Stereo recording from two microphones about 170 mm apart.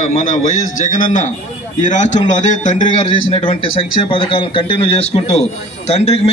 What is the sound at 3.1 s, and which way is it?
A man's voice, 30° left (ahead or behind).